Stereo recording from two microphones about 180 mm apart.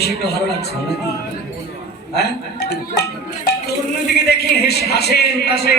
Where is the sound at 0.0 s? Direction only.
65° left (ahead or behind).